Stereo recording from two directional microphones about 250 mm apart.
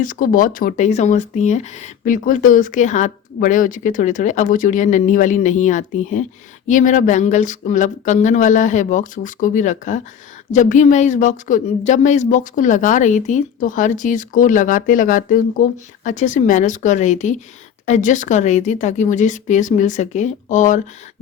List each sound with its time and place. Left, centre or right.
0.0 s speech: left